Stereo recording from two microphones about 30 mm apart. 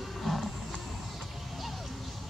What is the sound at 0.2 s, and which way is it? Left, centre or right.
Music, centre.